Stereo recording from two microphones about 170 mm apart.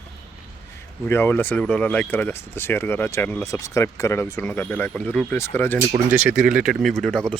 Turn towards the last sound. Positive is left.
turn(degrees=5)  # may be behind; listen again after turning